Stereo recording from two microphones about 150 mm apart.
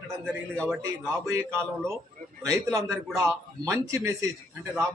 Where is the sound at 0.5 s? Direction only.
5° left (ahead or behind).